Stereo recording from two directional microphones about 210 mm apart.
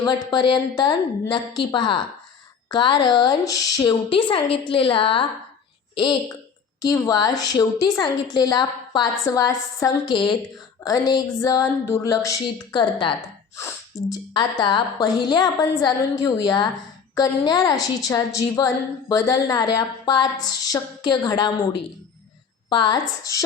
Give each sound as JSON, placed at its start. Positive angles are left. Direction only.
{"t": 0.0, "sound": "a woman's voice", "side_deg": 20}